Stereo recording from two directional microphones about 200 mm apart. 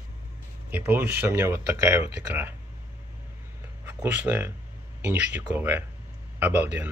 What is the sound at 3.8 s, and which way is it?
Speech, 10° right (ahead or behind).